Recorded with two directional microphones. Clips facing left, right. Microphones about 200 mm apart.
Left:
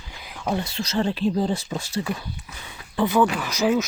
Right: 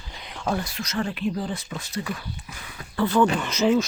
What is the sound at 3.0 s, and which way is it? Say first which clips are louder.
Speech: even; 10° left (ahead or behind).